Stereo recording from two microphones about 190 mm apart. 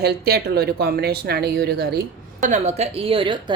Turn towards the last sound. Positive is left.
turn(degrees=-25)  # may be behind; listen again after turning